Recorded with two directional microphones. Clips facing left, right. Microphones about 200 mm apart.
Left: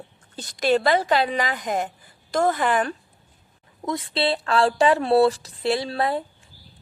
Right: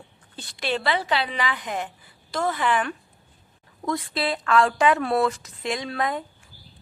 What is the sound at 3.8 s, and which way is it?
A woman's voice, 20° left (ahead or behind).